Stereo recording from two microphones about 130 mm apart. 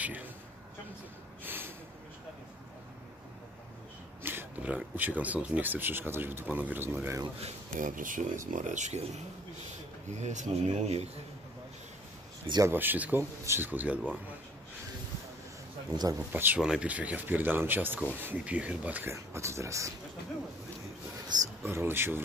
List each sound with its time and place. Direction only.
0.0 s a sound: 15° right (ahead or behind)
1.4 s a sound: 15° right (ahead or behind)
4.2 s speech: 15° right (ahead or behind)
7.7 s speech: 90° right; by 11.1 s 60° right (ahead or behind)
12.6 s speech: 15° right (ahead or behind)
16.3 s speech: 15° right (ahead or behind)
21.3 s speech: 35° right (ahead or behind)
21.6 s speech: 20° right (ahead or behind)